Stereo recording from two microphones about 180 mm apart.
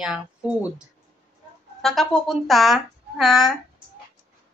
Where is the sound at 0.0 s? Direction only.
5° right (ahead or behind).